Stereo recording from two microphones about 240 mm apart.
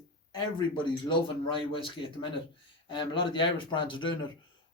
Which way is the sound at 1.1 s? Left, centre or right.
Left.